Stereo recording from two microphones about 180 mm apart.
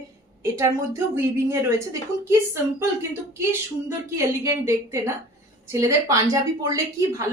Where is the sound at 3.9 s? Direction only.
15° right (ahead or behind).